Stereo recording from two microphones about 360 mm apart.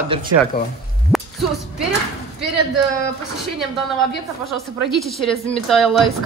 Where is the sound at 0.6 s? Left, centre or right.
Left.